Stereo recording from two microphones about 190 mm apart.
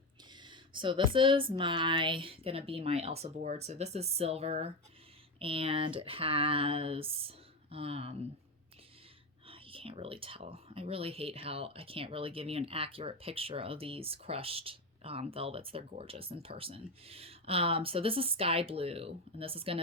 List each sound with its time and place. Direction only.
0.4 s speech: 25° right (ahead or behind)
9.5 s speech: 30° right (ahead or behind)